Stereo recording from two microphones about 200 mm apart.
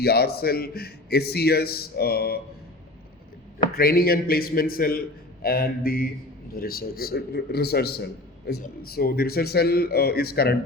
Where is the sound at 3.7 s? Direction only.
50° left (ahead or behind).